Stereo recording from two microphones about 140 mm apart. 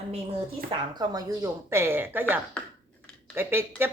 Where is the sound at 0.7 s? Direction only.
30° right (ahead or behind).